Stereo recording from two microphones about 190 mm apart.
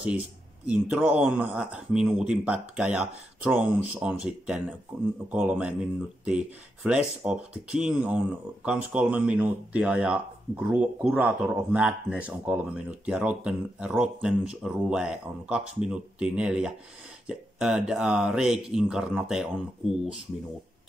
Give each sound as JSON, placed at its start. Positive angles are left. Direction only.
{"t": 0.7, "sound": "speech", "side_deg": -10}